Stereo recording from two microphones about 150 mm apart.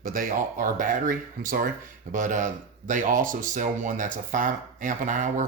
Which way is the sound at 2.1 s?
55° right (ahead or behind).